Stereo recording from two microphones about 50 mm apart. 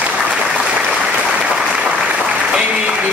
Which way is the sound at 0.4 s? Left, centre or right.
Right.